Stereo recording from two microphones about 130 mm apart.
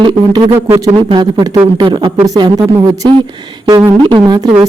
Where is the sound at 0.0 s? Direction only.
35° right (ahead or behind).